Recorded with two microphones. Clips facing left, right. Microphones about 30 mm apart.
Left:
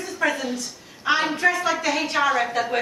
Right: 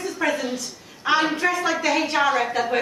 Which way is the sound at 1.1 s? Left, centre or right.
Centre.